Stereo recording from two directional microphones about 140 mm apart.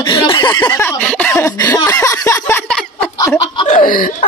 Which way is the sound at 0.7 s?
15° left (ahead or behind).